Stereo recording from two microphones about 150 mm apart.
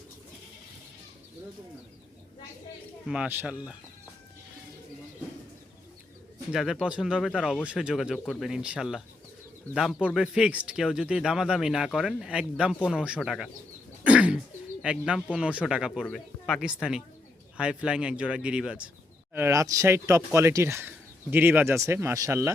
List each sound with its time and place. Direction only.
3.1 s speech: 10° right (ahead or behind)
6.5 s speech: 5° right (ahead or behind)
14.0 s cough: 10° right (ahead or behind)
14.8 s speech: 5° right (ahead or behind)